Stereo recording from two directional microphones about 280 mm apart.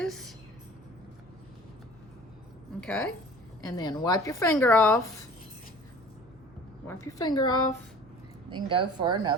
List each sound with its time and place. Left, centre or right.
0.0 s a sound: centre
2.8 s speech: centre
3.8 s a woman's voice: centre
6.8 s a woman's voice: centre
8.4 s speech: centre